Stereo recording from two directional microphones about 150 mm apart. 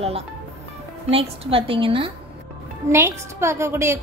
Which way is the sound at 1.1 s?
40° right (ahead or behind).